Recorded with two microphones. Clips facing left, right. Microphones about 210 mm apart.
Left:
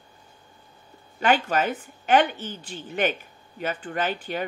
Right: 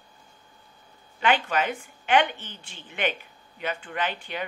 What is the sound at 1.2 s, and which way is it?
A woman's voice, 40° left (ahead or behind).